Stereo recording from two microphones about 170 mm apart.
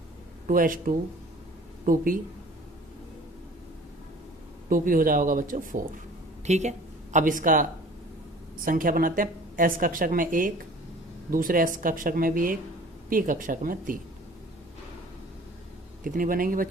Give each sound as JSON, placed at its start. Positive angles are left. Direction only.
{"t": 0.4, "sound": "a woman's voice", "side_deg": -55}
{"t": 4.7, "sound": "a woman's voice", "side_deg": -55}
{"t": 16.0, "sound": "a woman's voice", "side_deg": -55}